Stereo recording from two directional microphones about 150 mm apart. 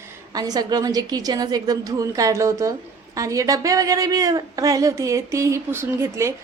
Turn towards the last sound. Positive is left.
turn(degrees=-20)  # may be behind; listen again after turning